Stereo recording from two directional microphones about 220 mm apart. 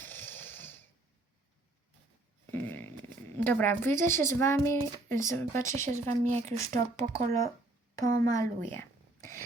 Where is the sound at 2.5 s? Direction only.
10° left (ahead or behind).